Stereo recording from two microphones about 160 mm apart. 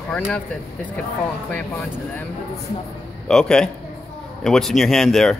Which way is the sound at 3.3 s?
5° left (ahead or behind).